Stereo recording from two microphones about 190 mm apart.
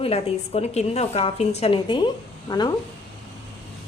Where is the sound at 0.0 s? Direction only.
30° left (ahead or behind).